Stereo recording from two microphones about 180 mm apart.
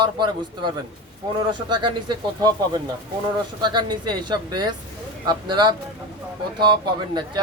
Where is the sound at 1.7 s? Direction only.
25° right (ahead or behind).